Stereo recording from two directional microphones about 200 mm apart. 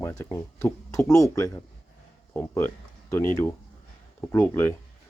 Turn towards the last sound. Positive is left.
turn(degrees=15)  # may be behind; listen again after turning